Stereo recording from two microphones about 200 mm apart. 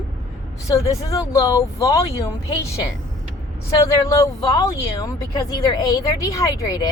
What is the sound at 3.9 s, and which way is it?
Speech, 15° left (ahead or behind).